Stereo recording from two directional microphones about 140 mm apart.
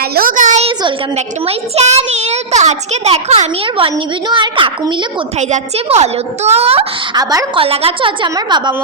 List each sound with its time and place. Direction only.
0.0 s a sound: 90° right; by 0.7 s 60° right (ahead or behind)
1.1 s a child's voice: 50° right (ahead or behind)
5.4 s a child's voice: 55° right (ahead or behind)
7.2 s a woman's voice: 25° right (ahead or behind)
7.5 s a woman's voice: 45° right (ahead or behind)